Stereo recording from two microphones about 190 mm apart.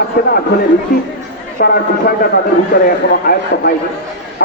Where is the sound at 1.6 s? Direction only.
55° left (ahead or behind).